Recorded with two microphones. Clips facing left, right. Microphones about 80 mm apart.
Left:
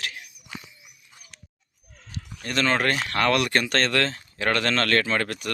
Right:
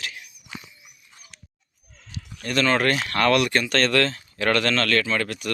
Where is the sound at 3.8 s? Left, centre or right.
Left.